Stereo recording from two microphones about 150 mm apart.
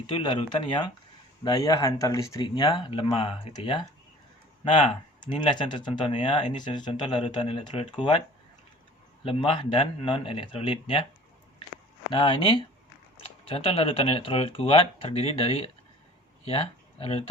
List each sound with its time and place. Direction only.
0.2 s speech: 30° left (ahead or behind)
9.2 s speech: 35° left (ahead or behind)
12.1 s speech: 35° left (ahead or behind)